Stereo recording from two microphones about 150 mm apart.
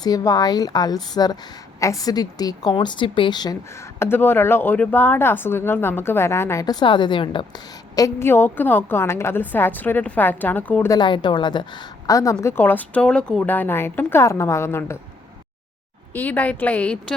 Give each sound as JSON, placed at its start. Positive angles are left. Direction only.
{"t": 0.0, "sound": "a woman's voice", "side_deg": 25}
{"t": 4.0, "sound": "speech", "side_deg": 15}
{"t": 10.8, "sound": "speech", "side_deg": 30}
{"t": 16.1, "sound": "speech", "side_deg": 10}